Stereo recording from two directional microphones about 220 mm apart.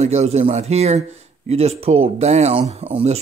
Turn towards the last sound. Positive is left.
turn(degrees=-25)  # may be behind; listen again after turning